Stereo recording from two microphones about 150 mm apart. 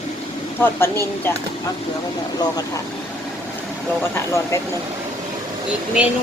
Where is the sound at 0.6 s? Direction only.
15° left (ahead or behind).